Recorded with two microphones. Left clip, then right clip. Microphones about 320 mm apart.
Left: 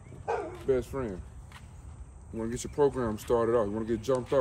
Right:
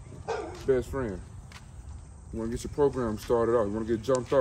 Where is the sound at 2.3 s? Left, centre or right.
Centre.